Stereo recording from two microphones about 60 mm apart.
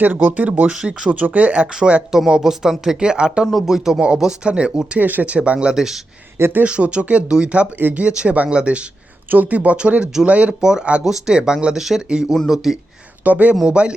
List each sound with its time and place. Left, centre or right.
0.0 s speech: right
0.7 s speech: centre
2.1 s speech: centre
3.4 s speech: centre
4.9 s speech: right
5.7 s speech: centre
6.4 s speech: right
6.7 s speech: centre
13.2 s speech: right